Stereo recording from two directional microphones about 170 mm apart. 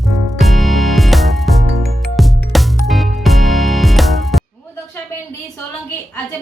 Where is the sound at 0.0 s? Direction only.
Centre (ahead or behind).